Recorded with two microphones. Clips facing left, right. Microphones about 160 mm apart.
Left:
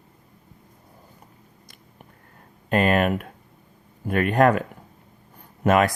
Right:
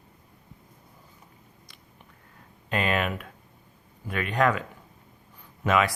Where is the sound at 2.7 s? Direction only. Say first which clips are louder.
Left 7 dB; 45° left (ahead or behind).